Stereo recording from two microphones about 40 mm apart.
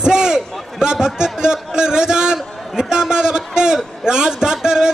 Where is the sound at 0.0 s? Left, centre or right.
Centre.